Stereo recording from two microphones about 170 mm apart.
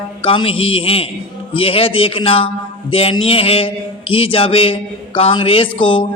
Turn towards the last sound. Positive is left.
turn(degrees=30)  # may be behind; listen again after turning